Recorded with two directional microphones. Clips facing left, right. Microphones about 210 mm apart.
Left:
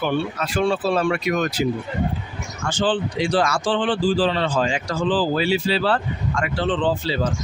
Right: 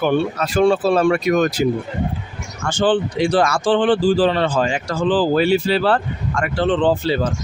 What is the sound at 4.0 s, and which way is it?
Speech, 60° right (ahead or behind).